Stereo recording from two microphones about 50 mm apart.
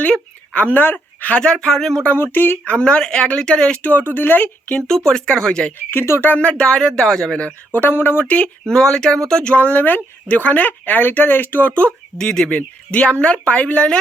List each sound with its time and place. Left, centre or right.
0.5 s speech: left
1.6 s speech: centre
2.1 s speech: left
2.6 s speech: left
3.8 s speech: left
5.0 s speech: centre
5.9 s speech: left
6.4 s speech: centre
7.7 s speech: left
8.7 s speech: centre
9.4 s speech: left
12.1 s speech: centre